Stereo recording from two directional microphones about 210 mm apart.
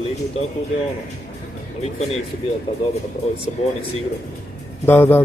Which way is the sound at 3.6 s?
30° left (ahead or behind).